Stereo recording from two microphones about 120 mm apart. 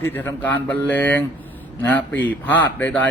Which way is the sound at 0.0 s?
15° left (ahead or behind).